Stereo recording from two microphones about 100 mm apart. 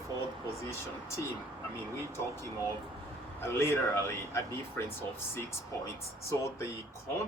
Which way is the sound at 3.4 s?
25° left (ahead or behind).